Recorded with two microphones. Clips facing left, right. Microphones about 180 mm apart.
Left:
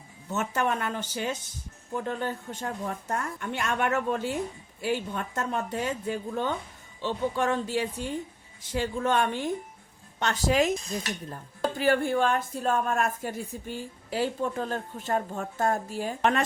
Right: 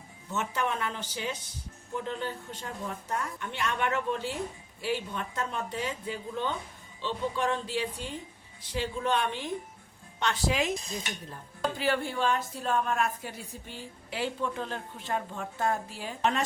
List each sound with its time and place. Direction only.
0.3 s speech: 50° left (ahead or behind)